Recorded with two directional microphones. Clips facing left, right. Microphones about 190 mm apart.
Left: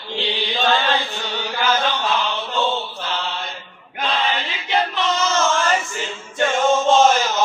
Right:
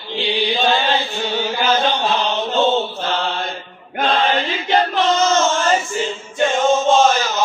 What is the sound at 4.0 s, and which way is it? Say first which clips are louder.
Male singing: right 5 dB; 50° right (ahead or behind).